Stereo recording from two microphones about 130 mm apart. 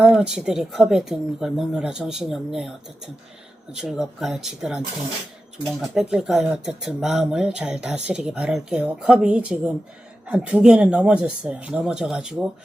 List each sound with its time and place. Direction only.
0.0 s speech: 5° right (ahead or behind)
5.8 s speech: 5° right (ahead or behind)